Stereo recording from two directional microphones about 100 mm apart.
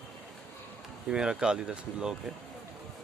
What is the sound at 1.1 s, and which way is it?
Speech, 10° right (ahead or behind).